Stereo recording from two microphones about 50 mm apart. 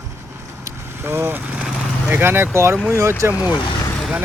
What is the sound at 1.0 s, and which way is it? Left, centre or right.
Speech, right.